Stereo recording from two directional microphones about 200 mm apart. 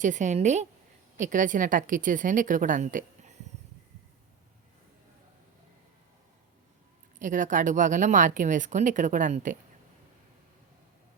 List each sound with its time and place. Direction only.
0.0 s a woman's voice: 40° right (ahead or behind)
7.2 s a woman's voice: 40° right (ahead or behind)